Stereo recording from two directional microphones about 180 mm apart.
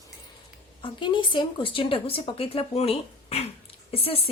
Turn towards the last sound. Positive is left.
turn(degrees=30)  # may be behind; listen again after turning